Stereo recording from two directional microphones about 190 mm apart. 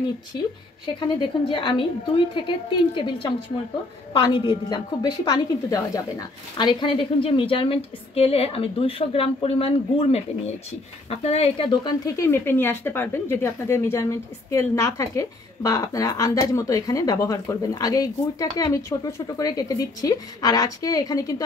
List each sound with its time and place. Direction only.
0.3 s a woman's voice: 20° left (ahead or behind)